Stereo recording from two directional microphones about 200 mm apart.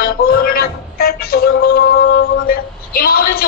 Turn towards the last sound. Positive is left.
turn(degrees=45)  # may be behind; listen again after turning